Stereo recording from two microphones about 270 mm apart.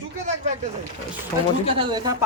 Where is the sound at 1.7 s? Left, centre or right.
Centre.